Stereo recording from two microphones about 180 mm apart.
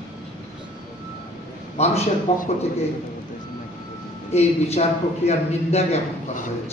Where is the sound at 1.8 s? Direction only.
40° left (ahead or behind).